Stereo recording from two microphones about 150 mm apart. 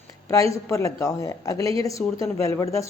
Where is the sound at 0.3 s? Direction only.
20° left (ahead or behind).